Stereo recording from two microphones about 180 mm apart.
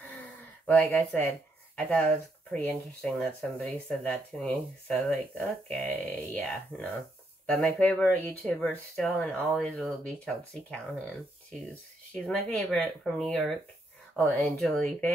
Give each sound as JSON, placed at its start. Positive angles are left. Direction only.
{"t": 0.7, "sound": "speech", "side_deg": 10}